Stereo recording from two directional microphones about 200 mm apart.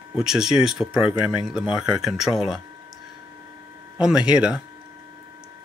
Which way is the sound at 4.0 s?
5° right (ahead or behind).